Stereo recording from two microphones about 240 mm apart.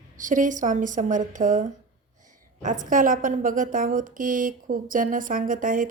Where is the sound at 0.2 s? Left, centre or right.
Right.